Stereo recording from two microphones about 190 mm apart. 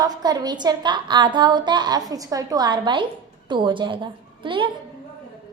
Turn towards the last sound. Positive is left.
turn(degrees=-25)  # may be behind; listen again after turning